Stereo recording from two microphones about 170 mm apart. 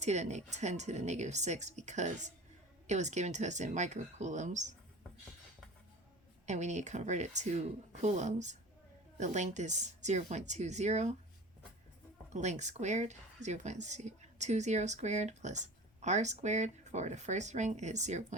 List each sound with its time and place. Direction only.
0.0 s a woman's voice: 40° right (ahead or behind)
6.4 s a woman's voice: 45° right (ahead or behind)
12.3 s a woman's voice: 45° right (ahead or behind)